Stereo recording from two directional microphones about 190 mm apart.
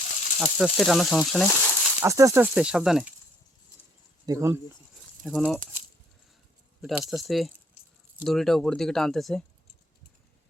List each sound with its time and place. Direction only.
0.3 s speech: 5° right (ahead or behind)
2.0 s speech: 15° right (ahead or behind)
4.3 s speech: 15° right (ahead or behind)
5.2 s speech: centre (ahead or behind)
6.8 s speech: centre (ahead or behind)